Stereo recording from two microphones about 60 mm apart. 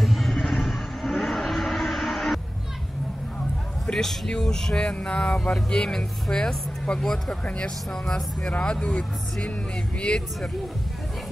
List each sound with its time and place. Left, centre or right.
0.0 s vehicle: centre
3.8 s speech: centre